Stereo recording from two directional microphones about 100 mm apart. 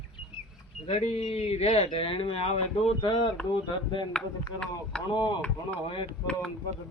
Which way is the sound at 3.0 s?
60° left (ahead or behind).